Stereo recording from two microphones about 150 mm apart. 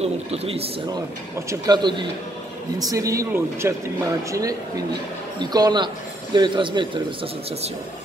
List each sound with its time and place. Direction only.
0.0 s speech: 40° right (ahead or behind)
1.5 s speech: 30° right (ahead or behind)